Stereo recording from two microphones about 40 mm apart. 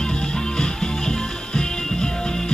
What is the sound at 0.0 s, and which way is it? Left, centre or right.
Music, centre.